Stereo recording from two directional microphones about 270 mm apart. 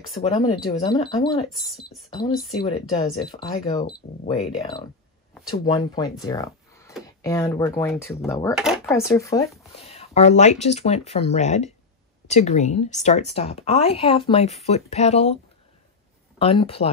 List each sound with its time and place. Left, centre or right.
0.1 s speech: centre
1.5 s speech: centre
2.0 s speech: centre
6.2 s a sound: centre
7.2 s speech: centre
9.8 s speech: left
16.3 s speech: left